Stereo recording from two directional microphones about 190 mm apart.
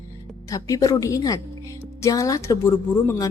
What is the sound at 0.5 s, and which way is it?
A woman's voice, 20° left (ahead or behind).